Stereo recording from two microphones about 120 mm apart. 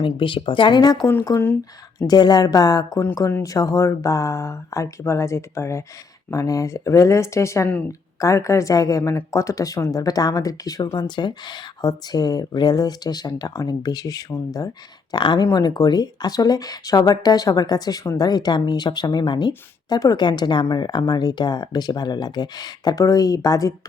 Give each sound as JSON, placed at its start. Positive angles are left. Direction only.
{"t": 0.0, "sound": "speech", "side_deg": 45}